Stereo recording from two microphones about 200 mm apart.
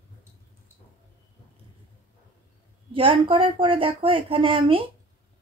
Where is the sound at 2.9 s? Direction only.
25° right (ahead or behind).